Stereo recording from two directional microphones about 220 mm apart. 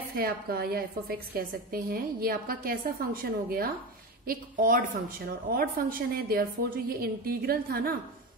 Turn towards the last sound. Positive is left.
turn(degrees=-40)  # may be behind; listen again after turning